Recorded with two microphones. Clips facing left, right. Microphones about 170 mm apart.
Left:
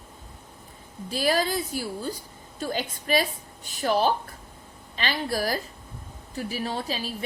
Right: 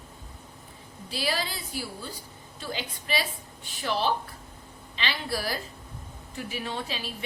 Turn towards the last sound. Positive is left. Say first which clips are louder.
# left 4 dB
turn(degrees=40)  # may be behind; listen again after turning